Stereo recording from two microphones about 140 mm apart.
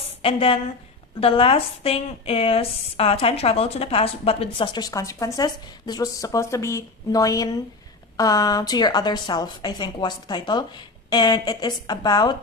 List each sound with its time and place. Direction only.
0.2 s a woman's voice: 40° left (ahead or behind)